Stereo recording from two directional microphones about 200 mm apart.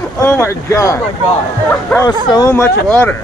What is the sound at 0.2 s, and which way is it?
Speech, 15° left (ahead or behind).